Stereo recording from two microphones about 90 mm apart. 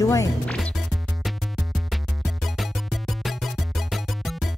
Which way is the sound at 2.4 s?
Centre (ahead or behind).